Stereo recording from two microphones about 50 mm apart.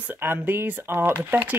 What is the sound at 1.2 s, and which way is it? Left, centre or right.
Speech, right.